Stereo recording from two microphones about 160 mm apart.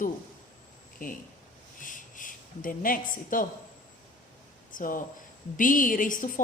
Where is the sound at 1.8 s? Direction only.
55° left (ahead or behind).